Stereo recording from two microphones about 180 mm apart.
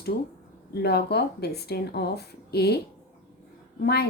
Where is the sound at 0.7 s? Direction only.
65° left (ahead or behind).